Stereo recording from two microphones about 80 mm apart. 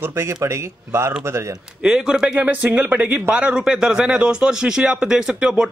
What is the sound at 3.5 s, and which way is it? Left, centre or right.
Speech, centre.